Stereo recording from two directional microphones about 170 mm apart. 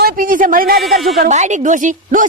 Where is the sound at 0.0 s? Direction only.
55° right (ahead or behind).